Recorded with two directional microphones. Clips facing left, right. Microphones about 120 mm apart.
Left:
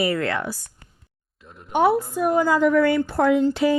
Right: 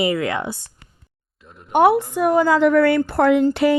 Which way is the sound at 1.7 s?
65° right (ahead or behind).